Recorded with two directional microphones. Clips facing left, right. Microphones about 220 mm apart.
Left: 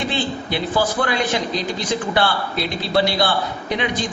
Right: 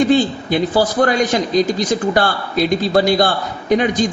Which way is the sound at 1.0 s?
45° right (ahead or behind).